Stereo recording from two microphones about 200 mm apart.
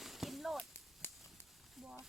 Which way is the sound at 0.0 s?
Centre (ahead or behind).